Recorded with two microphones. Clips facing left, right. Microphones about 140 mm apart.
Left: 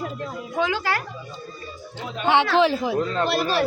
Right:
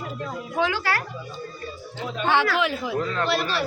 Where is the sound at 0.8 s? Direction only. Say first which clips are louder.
Left 1 dB; 20° left (ahead or behind).